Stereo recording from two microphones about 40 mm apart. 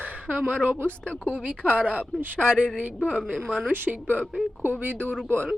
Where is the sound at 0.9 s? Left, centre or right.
Left.